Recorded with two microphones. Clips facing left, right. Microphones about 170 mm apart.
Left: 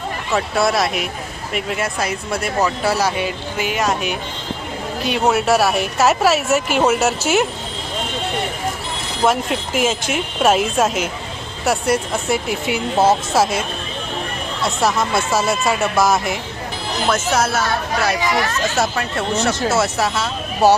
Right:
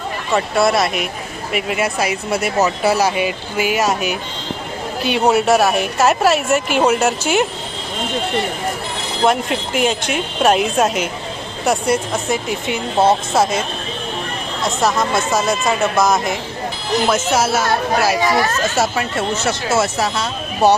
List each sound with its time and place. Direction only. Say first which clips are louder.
0.3 s speech: right 2 dB; centre (ahead or behind)
9.2 s speech: right 1 dB; centre (ahead or behind)
14.8 s speech: right 1 dB; 10° left (ahead or behind)
17.1 s speech: even; 5° right (ahead or behind)
18.8 s speech: right 2 dB; 5° right (ahead or behind)